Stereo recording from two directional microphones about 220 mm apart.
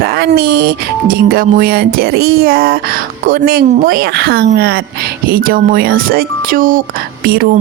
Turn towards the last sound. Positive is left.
turn(degrees=-40)  # may be behind; listen again after turning